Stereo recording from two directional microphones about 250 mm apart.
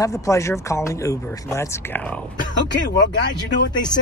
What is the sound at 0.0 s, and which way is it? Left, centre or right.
Speech, centre.